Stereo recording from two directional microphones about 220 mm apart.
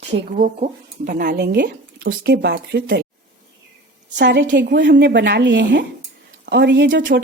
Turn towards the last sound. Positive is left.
turn(degrees=-55)  # may be behind; listen again after turning